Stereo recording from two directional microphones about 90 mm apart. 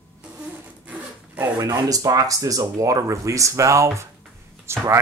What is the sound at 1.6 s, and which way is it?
Speech, 40° right (ahead or behind).